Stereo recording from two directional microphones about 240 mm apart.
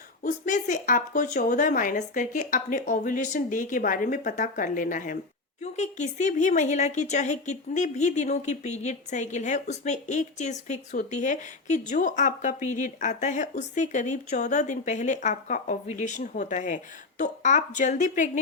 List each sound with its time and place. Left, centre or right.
0.2 s a woman's voice: left